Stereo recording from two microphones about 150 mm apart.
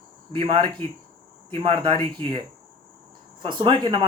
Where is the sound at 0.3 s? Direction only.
35° right (ahead or behind).